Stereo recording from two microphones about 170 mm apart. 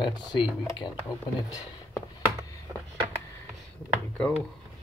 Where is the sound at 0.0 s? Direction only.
25° left (ahead or behind).